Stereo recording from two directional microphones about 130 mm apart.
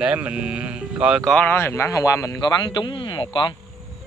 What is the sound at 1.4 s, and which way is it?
Speech, 20° left (ahead or behind).